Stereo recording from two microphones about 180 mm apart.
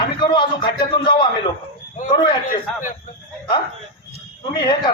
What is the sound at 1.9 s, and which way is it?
Speech, 45° left (ahead or behind).